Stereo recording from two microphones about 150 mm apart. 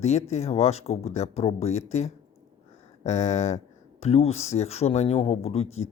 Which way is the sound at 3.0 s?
50° left (ahead or behind).